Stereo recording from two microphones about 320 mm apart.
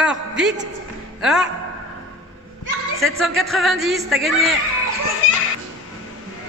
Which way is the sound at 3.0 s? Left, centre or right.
Centre.